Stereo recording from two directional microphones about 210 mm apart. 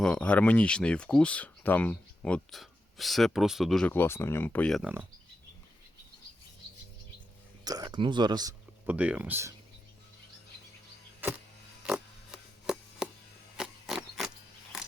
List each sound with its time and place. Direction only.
0.0 s speech: 5° left (ahead or behind)
7.6 s speech: 20° right (ahead or behind)
8.9 s speech: 5° right (ahead or behind)
11.9 s a sound: 5° right (ahead or behind)